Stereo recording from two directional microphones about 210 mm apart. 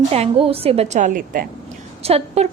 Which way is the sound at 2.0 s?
30° right (ahead or behind).